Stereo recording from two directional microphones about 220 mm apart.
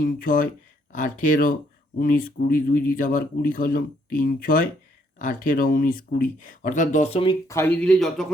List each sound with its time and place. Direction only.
0.0 s speech: 40° left (ahead or behind); by 8.3 s centre (ahead or behind)